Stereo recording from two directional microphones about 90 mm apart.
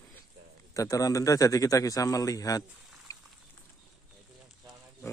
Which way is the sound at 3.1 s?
40° left (ahead or behind).